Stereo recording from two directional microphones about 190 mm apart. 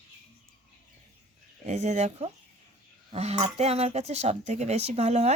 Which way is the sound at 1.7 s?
40° right (ahead or behind).